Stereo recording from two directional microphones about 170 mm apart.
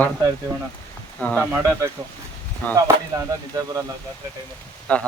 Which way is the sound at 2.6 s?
10° left (ahead or behind).